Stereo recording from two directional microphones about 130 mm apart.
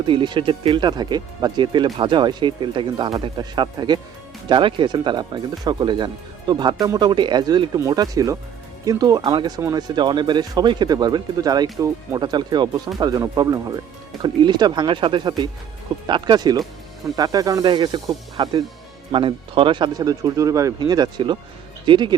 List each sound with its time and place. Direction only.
0.0 s speech: 35° right (ahead or behind)